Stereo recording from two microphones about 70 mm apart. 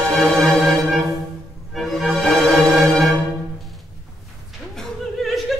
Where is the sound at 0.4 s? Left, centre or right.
Centre.